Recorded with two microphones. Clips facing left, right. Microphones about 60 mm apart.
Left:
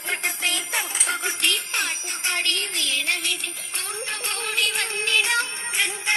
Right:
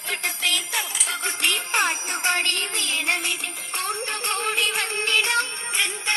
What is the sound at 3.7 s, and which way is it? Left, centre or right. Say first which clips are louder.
Music: right 5 dB; centre.